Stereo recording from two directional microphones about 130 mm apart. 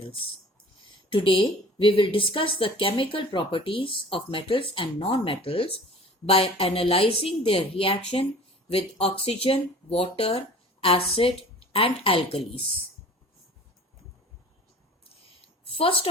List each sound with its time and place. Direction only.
1.1 s a woman's voice: 40° left (ahead or behind)
15.6 s a woman's voice: 45° left (ahead or behind)